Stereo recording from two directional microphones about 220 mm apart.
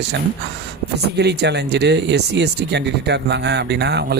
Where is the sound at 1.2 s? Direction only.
50° right (ahead or behind).